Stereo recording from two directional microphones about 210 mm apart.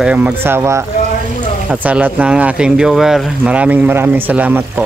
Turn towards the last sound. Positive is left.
turn(degrees=-5)  # may be behind; listen again after turning